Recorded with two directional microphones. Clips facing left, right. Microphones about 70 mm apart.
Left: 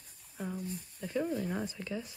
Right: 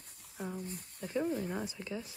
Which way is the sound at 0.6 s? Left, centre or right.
Right.